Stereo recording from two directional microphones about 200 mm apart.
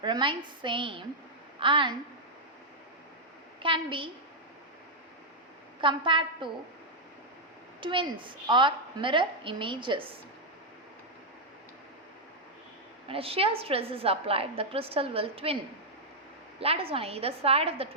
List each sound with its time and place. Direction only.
0.0 s a woman's voice: 25° right (ahead or behind)
3.6 s a woman's voice: 25° right (ahead or behind)
5.8 s a woman's voice: 25° right (ahead or behind)
7.8 s a woman's voice: 25° right (ahead or behind)
13.1 s a woman's voice: 30° right (ahead or behind)
16.6 s a woman's voice: 30° right (ahead or behind)